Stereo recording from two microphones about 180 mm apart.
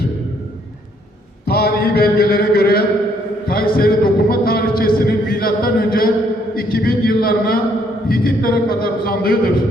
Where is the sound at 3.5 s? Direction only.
55° left (ahead or behind).